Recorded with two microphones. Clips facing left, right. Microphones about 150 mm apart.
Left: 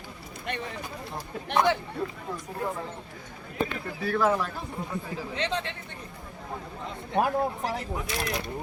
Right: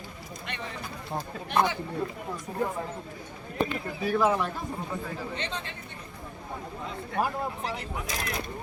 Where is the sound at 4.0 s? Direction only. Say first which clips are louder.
Even; 10° right (ahead or behind).